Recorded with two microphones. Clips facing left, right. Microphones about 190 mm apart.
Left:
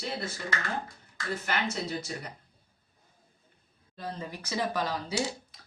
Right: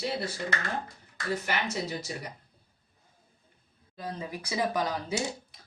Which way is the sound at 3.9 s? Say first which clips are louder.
Right 1 dB; 10° right (ahead or behind).